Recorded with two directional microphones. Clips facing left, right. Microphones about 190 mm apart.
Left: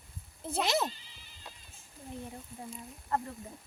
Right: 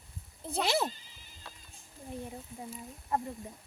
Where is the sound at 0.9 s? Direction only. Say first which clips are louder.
Even; 45° right (ahead or behind).